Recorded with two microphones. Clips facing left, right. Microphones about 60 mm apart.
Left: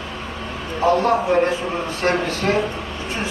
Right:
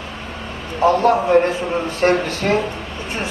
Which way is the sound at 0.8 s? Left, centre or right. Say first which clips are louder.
Right 2 dB; right.